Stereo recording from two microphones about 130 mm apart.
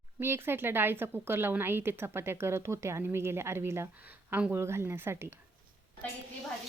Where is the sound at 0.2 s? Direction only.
20° right (ahead or behind).